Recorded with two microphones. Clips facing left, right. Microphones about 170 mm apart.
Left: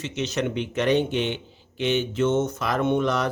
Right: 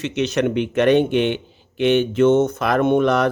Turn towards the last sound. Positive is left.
turn(degrees=-60)  # may be behind; listen again after turning